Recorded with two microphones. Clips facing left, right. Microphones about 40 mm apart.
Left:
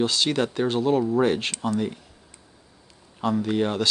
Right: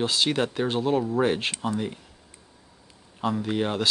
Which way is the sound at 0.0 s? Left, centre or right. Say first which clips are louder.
Left 1 dB; centre.